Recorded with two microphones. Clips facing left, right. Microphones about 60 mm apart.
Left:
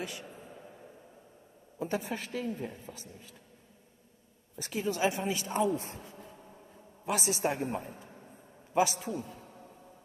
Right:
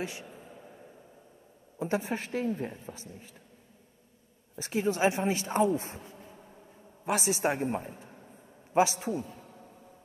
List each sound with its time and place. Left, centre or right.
0.0 s speech: right
1.8 s a woman's voice: right
4.6 s a woman's voice: right
5.6 s speech: right
6.0 s a sound: centre
7.1 s a woman's voice: right
7.4 s a woman's voice: right
8.7 s a man's voice: right